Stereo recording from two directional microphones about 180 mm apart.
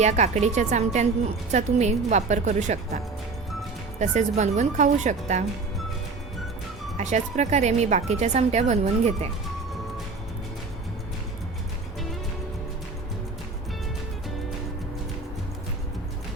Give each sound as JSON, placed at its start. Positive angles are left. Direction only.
{"t": 0.0, "sound": "speech", "side_deg": -40}
{"t": 4.0, "sound": "speech", "side_deg": -40}
{"t": 6.9, "sound": "speech", "side_deg": -40}